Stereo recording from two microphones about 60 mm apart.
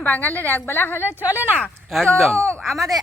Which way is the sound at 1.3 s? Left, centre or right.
Right.